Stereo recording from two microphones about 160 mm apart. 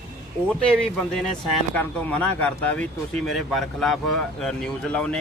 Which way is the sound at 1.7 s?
5° left (ahead or behind).